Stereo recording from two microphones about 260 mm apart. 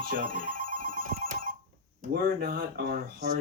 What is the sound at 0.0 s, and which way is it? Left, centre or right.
Speech, right.